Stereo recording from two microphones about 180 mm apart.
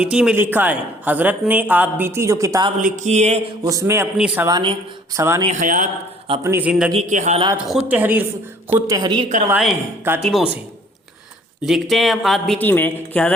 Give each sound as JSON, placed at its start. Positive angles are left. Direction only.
{"t": 0.0, "sound": "a woman's voice", "side_deg": -5}
{"t": 2.8, "sound": "speech", "side_deg": -45}
{"t": 3.6, "sound": "a woman's voice", "side_deg": -20}
{"t": 4.5, "sound": "speech", "side_deg": -30}
{"t": 5.1, "sound": "a woman's voice", "side_deg": -15}
{"t": 5.5, "sound": "speech", "side_deg": -45}
{"t": 6.4, "sound": "a woman's voice", "side_deg": -10}
{"t": 6.9, "sound": "speech", "side_deg": -40}
{"t": 7.5, "sound": "a woman's voice", "side_deg": -10}
{"t": 8.7, "sound": "speech", "side_deg": -20}
{"t": 10.0, "sound": "a woman's voice", "side_deg": -10}
{"t": 11.6, "sound": "speech", "side_deg": 0}